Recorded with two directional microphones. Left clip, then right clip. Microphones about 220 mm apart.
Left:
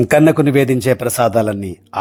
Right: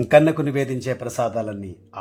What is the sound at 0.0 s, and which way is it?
A man's voice, 25° left (ahead or behind).